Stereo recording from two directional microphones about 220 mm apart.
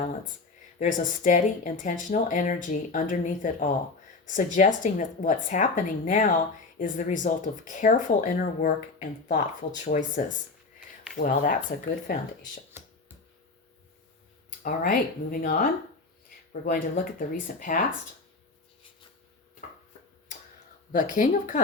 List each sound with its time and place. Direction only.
0.8 s speech: 35° left (ahead or behind)
12.7 s a sound: 10° right (ahead or behind)
14.6 s speech: 40° left (ahead or behind)
20.9 s speech: 35° left (ahead or behind)